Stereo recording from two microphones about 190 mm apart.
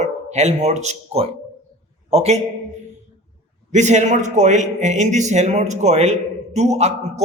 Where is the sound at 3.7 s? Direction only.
40° right (ahead or behind).